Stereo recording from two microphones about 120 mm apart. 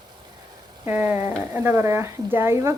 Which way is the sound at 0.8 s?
15° right (ahead or behind).